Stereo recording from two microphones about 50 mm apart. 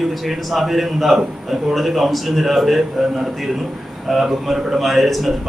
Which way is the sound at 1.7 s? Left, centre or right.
Centre.